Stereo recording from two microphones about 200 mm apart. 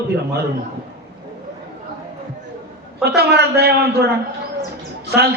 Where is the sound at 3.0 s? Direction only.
55° right (ahead or behind).